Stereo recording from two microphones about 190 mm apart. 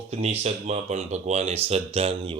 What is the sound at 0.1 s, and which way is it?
Speech, 35° right (ahead or behind).